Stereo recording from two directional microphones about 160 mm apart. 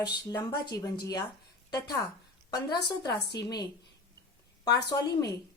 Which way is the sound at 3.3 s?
25° left (ahead or behind).